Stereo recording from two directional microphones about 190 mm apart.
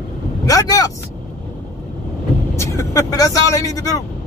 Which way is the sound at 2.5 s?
15° left (ahead or behind).